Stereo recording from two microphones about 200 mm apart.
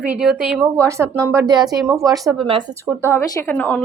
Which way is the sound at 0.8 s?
15° right (ahead or behind).